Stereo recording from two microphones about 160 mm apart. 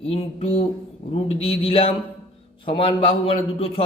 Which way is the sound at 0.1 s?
40° left (ahead or behind).